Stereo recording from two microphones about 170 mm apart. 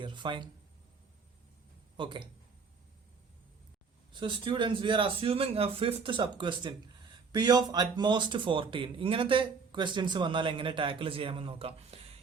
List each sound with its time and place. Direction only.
0.0 s speech: 30° right (ahead or behind)
2.0 s speech: 30° right (ahead or behind)
4.1 s speech: 30° right (ahead or behind)